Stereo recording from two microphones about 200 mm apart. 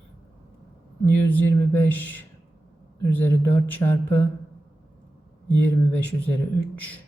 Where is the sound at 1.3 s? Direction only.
10° left (ahead or behind).